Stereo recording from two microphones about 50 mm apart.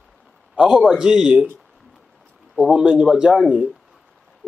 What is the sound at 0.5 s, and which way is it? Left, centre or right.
Speech, centre.